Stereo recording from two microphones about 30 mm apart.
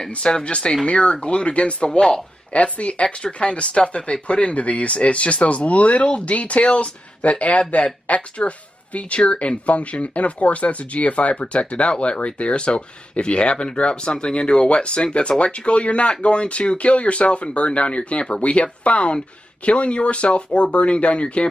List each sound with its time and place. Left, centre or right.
0.3 s speech: left